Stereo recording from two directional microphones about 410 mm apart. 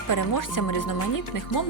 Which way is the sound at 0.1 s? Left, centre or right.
Left.